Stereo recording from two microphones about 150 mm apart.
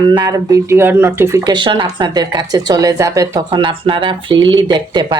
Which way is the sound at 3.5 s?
35° right (ahead or behind).